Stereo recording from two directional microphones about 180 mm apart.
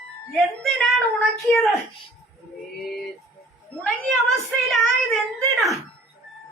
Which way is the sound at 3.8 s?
Centre (ahead or behind).